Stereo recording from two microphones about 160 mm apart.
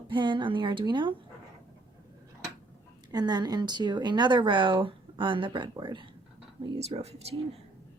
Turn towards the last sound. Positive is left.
turn(degrees=-40)  # may be behind; listen again after turning